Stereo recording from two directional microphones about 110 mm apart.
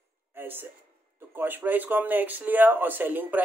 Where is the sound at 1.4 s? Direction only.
15° right (ahead or behind).